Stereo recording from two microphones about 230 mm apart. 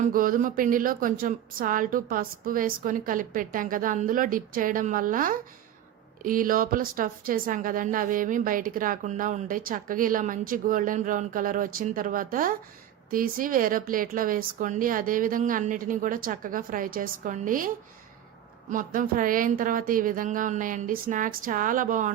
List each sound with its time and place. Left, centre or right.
0.0 s a woman's voice: right
18.7 s a woman's voice: right